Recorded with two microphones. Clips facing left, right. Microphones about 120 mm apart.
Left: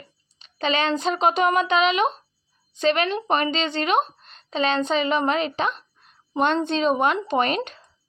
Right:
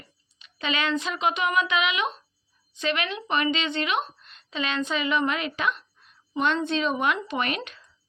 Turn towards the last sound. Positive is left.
turn(degrees=35)  # may be behind; listen again after turning